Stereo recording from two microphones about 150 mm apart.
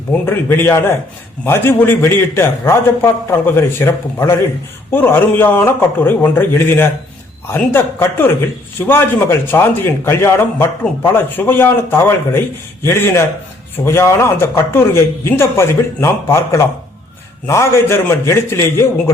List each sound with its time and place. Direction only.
0.1 s a man's voice: 15° left (ahead or behind)